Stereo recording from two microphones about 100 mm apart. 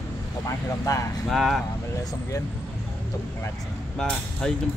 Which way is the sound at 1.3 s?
Centre (ahead or behind).